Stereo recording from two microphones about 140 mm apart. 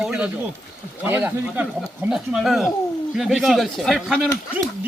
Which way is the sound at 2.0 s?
5° right (ahead or behind).